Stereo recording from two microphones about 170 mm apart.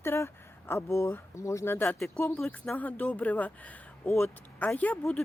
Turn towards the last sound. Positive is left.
turn(degrees=10)  # may be behind; listen again after turning